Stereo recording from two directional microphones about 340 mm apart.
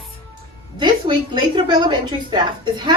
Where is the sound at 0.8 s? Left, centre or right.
Centre.